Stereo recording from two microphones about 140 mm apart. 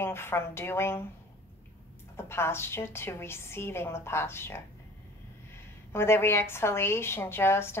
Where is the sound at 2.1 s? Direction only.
15° left (ahead or behind).